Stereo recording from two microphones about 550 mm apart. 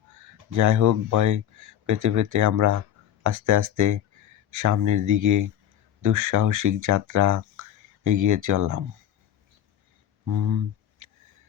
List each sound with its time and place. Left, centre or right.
0.5 s speech: right
10.2 s speech: right